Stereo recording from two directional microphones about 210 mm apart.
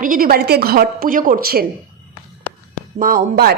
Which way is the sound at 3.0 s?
40° right (ahead or behind).